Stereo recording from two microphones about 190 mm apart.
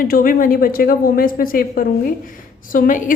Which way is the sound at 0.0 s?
50° left (ahead or behind).